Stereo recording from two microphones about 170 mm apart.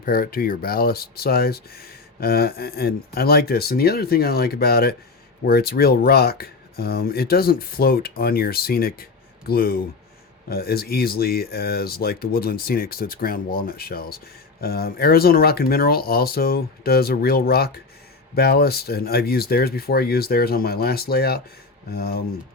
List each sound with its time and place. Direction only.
0.0 s speech: 60° left (ahead or behind)